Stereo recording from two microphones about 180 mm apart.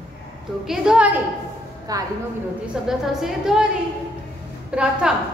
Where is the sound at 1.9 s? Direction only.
20° right (ahead or behind).